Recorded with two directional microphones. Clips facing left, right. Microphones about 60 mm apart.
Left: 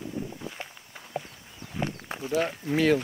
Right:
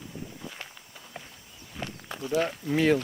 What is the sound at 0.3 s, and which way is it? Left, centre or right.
Walk, centre.